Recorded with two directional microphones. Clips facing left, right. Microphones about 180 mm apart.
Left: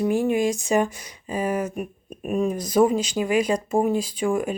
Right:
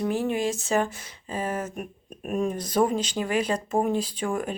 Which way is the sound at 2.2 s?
5° left (ahead or behind).